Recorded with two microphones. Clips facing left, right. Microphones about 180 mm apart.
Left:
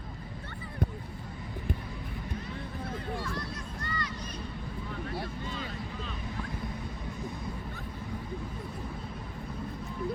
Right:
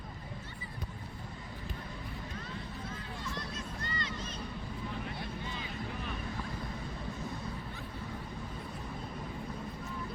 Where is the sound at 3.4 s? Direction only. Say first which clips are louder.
Left 2 dB; 20° right (ahead or behind).